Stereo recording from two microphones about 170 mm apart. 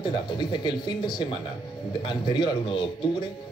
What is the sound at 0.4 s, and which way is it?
A man's voice, 25° left (ahead or behind).